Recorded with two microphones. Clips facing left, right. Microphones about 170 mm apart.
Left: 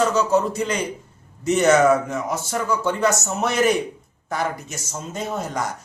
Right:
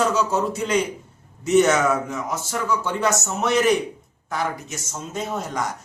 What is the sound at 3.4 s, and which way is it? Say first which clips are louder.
A man's voice: right 1 dB; centre (ahead or behind).